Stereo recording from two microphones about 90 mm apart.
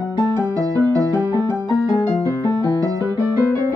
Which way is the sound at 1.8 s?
40° left (ahead or behind).